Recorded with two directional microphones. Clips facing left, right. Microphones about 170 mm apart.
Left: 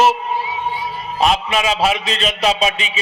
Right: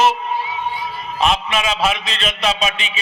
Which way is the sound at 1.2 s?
35° left (ahead or behind).